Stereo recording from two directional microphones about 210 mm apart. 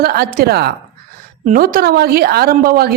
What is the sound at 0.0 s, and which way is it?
A woman's voice, 45° right (ahead or behind).